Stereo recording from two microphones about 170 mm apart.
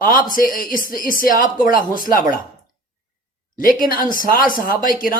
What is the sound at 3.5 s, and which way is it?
A man's voice, 55° left (ahead or behind).